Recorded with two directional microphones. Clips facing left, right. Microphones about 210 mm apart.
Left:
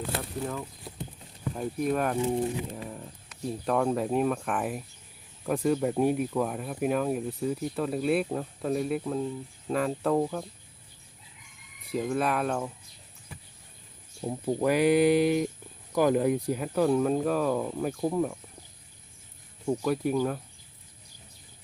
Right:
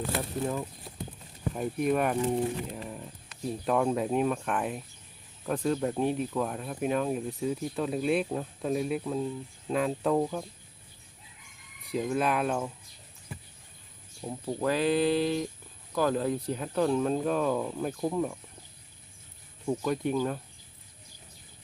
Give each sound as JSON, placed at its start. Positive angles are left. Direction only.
{"t": 0.4, "sound": "speech", "side_deg": -15}
{"t": 1.5, "sound": "speech", "side_deg": -5}
{"t": 2.2, "sound": "speech", "side_deg": 5}
{"t": 11.9, "sound": "speech", "side_deg": 0}
{"t": 14.2, "sound": "speech", "side_deg": 15}
{"t": 19.6, "sound": "speech", "side_deg": 10}